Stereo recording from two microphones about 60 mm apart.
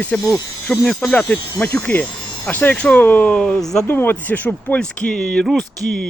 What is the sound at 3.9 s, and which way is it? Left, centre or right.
Speech, left.